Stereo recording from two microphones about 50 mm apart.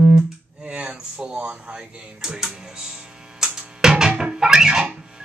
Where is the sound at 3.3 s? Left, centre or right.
Centre.